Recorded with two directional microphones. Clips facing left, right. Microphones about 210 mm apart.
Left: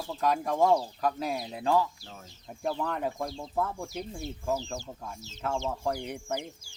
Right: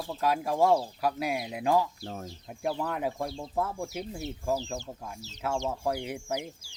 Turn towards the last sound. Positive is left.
turn(degrees=-5)  # may be behind; listen again after turning